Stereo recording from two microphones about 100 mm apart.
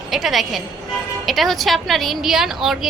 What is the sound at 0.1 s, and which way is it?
A woman's voice, centre (ahead or behind).